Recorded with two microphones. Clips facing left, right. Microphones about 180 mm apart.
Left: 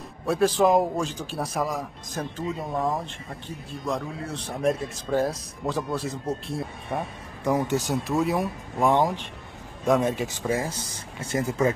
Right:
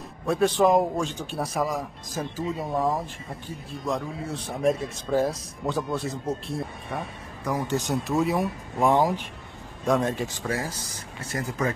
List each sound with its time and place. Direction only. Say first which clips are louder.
0.3 s speech: even; centre (ahead or behind)
7.4 s speech: left 4 dB; 20° left (ahead or behind)
7.7 s speech: even; centre (ahead or behind)
10.0 s speech: left 2 dB; 15° left (ahead or behind)